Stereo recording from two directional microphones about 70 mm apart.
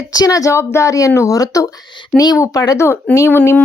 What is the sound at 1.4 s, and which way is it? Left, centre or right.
Speech, left.